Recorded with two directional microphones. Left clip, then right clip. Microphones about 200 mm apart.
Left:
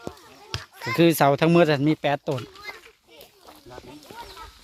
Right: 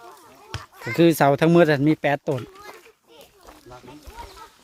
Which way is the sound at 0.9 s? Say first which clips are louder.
Right 1 dB; 10° right (ahead or behind).